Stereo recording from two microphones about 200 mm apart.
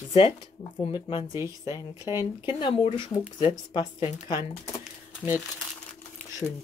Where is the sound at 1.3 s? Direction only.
15° right (ahead or behind).